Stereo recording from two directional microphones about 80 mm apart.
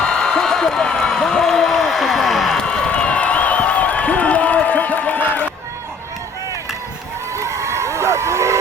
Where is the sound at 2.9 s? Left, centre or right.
Centre.